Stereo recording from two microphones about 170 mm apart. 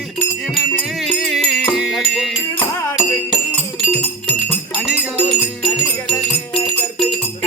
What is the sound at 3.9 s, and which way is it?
Music, 10° left (ahead or behind).